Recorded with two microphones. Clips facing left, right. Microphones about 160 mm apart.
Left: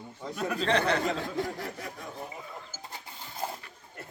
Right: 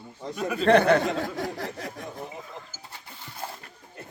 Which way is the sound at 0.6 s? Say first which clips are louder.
Right 9 dB; 55° right (ahead or behind).